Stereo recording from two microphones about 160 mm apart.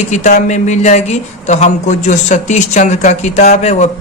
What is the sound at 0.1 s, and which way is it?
A man's voice, 45° left (ahead or behind).